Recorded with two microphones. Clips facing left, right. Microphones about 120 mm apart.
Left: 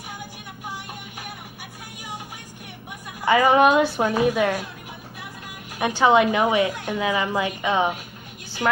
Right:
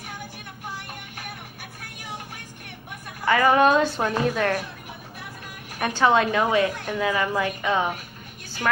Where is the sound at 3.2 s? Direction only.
15° left (ahead or behind).